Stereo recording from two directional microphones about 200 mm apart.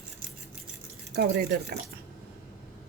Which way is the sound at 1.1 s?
55° right (ahead or behind).